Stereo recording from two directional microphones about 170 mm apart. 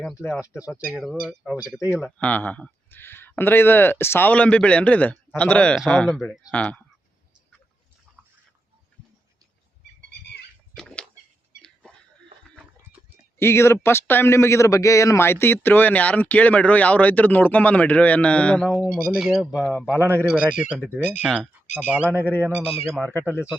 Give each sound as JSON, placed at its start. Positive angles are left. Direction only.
{"t": 0.5, "sound": "speech", "side_deg": -5}
{"t": 2.1, "sound": "a man's voice", "side_deg": 10}
{"t": 10.8, "sound": "a sound", "side_deg": 5}
{"t": 13.4, "sound": "a man's voice", "side_deg": 15}
{"t": 22.1, "sound": "a man's voice", "side_deg": 10}
{"t": 22.6, "sound": "speech", "side_deg": 35}
{"t": 22.9, "sound": "speech", "side_deg": 5}